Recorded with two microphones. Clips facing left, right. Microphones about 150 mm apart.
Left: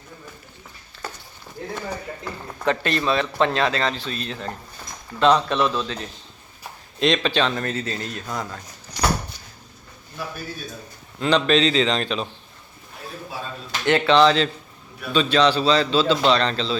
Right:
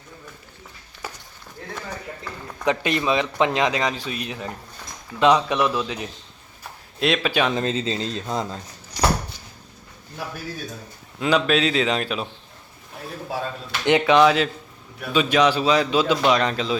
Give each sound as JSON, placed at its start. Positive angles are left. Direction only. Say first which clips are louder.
{"t": 1.0, "sound": "a sound", "louder": "left 1 dB", "side_deg": -10}
{"t": 1.7, "sound": "speech", "louder": "left 2 dB", "side_deg": 10}
{"t": 2.6, "sound": "speech", "louder": "even", "side_deg": -15}
{"t": 11.2, "sound": "speech", "louder": "left 1 dB", "side_deg": -5}
{"t": 13.8, "sound": "speech", "louder": "even", "side_deg": -15}